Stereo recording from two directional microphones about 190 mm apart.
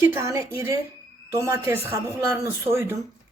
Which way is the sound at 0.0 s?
15° right (ahead or behind).